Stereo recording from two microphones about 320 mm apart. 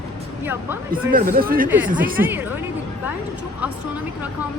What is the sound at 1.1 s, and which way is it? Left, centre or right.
Speech, right.